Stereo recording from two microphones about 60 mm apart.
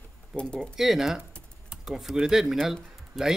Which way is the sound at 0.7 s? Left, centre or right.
Centre.